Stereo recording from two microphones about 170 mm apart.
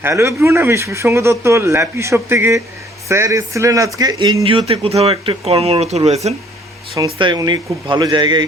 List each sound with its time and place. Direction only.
0.0 s speech: 15° right (ahead or behind); by 6.4 s 40° right (ahead or behind)
7.0 s speech: 25° right (ahead or behind)